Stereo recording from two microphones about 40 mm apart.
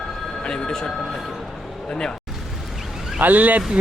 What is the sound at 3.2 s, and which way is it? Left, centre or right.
Speech, right.